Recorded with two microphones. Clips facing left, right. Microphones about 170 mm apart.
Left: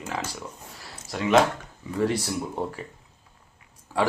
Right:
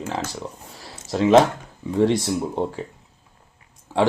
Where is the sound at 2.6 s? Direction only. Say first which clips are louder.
Right 4 dB; 25° right (ahead or behind).